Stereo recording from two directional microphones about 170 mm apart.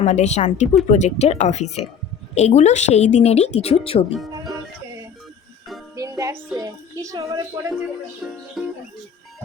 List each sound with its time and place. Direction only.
0.0 s a woman's voice: 40° left (ahead or behind)
6.0 s music: 20° right (ahead or behind)
6.6 s a woman's voice: 20° right (ahead or behind)
8.2 s music: centre (ahead or behind)